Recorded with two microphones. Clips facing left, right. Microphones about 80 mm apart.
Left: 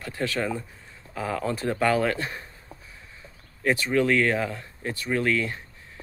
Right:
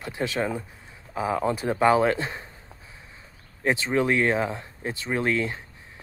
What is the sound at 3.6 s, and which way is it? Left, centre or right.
Speech, right.